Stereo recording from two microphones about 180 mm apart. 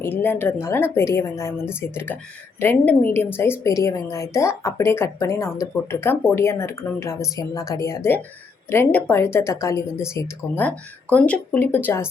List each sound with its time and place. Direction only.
0.0 s a woman's voice: 10° left (ahead or behind)